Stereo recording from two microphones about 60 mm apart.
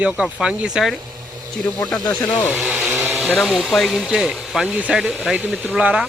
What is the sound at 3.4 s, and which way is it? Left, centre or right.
Speech, centre.